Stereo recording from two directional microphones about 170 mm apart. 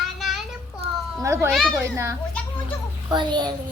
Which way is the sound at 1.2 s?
15° right (ahead or behind).